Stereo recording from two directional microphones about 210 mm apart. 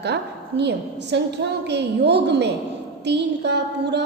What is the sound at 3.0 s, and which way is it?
Mantra, 55° right (ahead or behind).